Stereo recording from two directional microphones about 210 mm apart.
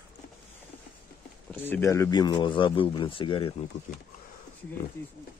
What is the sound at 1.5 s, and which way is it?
Speech, 10° left (ahead or behind).